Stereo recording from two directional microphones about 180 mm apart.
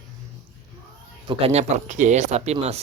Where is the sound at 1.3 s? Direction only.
35° right (ahead or behind).